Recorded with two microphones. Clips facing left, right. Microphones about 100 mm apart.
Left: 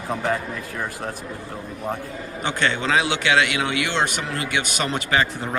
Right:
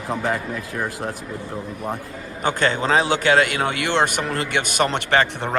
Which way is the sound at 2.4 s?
40° right (ahead or behind).